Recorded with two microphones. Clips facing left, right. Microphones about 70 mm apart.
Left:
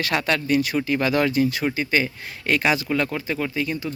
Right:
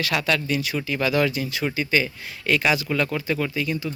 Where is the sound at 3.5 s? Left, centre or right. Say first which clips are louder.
Even; left.